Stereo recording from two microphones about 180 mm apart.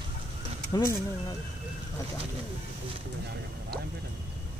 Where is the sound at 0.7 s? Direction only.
20° left (ahead or behind).